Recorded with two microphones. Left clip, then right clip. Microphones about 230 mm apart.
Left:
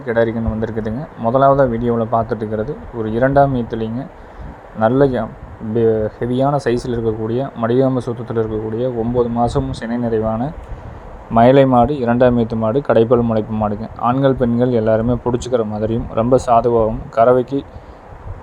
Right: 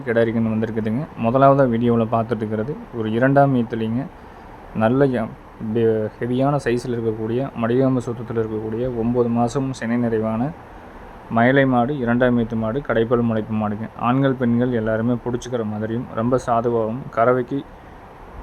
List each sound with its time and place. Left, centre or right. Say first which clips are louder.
0.3 s speech: left 1 dB; centre
1.7 s a man's voice: left 1 dB; centre
2.0 s speech: left 3 dB; centre
11.3 s speech: left 6 dB; centre